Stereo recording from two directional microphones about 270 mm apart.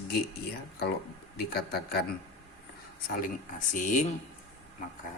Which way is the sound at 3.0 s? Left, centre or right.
Left.